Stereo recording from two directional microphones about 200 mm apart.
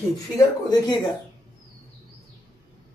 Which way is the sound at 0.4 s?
20° left (ahead or behind).